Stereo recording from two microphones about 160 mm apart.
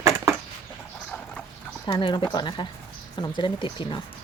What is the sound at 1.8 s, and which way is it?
Speech, 30° left (ahead or behind).